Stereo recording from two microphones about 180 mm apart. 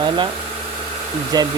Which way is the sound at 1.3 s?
20° right (ahead or behind).